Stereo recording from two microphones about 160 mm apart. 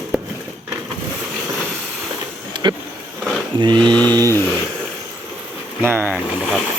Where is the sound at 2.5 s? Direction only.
30° right (ahead or behind).